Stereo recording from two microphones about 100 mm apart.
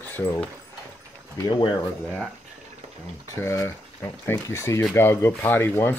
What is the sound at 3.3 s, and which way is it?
Speech, 25° left (ahead or behind).